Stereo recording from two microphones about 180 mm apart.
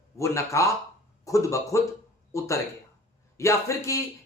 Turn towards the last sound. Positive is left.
turn(degrees=15)  # may be behind; listen again after turning